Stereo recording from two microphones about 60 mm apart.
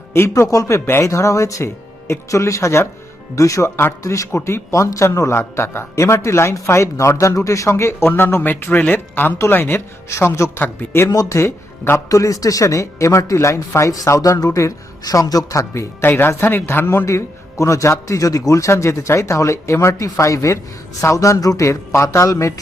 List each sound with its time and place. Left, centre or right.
0.1 s a man's voice: left
0.4 s speech: left
4.3 s speech: left
10.1 s speech: left
10.6 s speech: left
11.3 s speech: left
12.0 s speech: left
15.7 s speech: left
16.0 s speech: left
17.1 s speech: left